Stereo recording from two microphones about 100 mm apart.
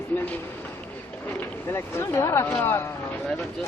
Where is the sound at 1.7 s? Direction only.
25° left (ahead or behind).